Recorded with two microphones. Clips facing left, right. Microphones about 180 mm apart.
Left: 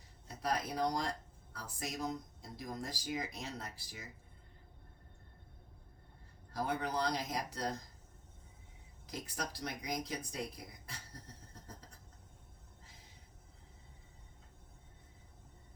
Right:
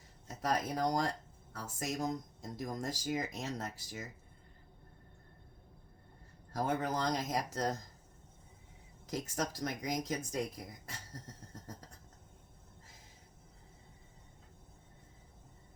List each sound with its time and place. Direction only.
0.3 s speech: 45° right (ahead or behind)
6.5 s speech: 45° right (ahead or behind)
9.0 s speech: 45° right (ahead or behind)